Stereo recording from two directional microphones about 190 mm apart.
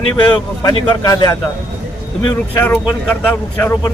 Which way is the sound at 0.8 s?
20° left (ahead or behind).